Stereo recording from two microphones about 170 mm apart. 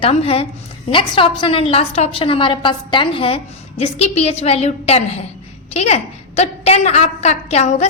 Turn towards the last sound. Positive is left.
turn(degrees=40)  # may be behind; listen again after turning